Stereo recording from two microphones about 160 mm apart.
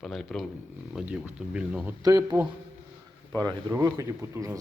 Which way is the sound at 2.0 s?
20° right (ahead or behind).